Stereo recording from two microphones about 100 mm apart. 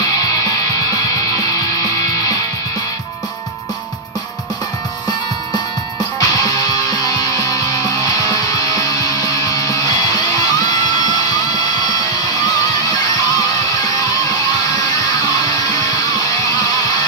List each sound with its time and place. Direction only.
0.0 s music: 35° left (ahead or behind)
6.1 s music: 35° left (ahead or behind)